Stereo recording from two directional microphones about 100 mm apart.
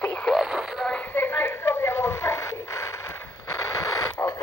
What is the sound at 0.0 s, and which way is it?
Radio, 10° left (ahead or behind).